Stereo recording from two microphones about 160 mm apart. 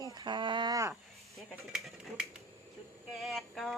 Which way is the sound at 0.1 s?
25° right (ahead or behind).